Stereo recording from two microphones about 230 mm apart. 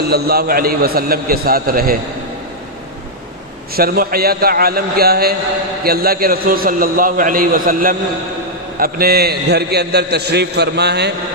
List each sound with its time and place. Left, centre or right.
0.1 s a man's voice: right
3.7 s a man's voice: right